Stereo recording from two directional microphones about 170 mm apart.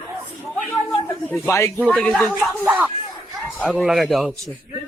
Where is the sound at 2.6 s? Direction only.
10° right (ahead or behind).